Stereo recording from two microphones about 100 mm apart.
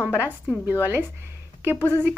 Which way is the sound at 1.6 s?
25° right (ahead or behind).